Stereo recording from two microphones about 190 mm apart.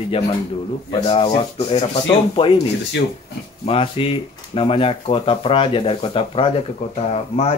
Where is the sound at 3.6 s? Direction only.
30° left (ahead or behind).